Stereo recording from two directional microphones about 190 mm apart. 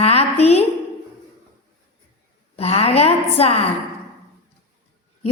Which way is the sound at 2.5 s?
30° left (ahead or behind).